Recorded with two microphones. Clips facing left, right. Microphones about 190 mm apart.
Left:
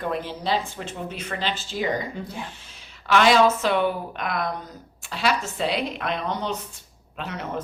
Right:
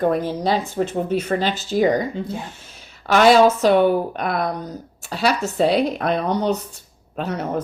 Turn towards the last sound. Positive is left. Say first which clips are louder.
# right 7 dB
turn(degrees=-40)  # may be behind; listen again after turning